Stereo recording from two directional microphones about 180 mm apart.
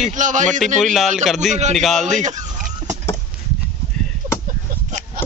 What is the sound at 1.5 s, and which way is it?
Speech, 40° right (ahead or behind).